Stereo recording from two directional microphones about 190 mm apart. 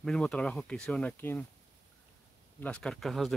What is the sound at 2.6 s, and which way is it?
Speech, 5° left (ahead or behind).